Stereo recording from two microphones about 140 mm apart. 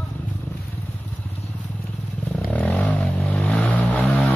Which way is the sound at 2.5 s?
10° left (ahead or behind).